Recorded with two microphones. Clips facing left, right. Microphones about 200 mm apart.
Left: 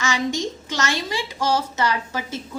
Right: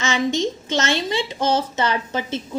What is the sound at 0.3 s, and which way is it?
A woman's voice, 25° right (ahead or behind).